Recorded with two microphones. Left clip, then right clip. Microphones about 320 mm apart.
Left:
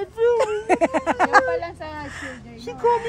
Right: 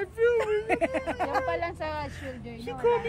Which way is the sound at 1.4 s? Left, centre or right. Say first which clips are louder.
Left 4 dB; right.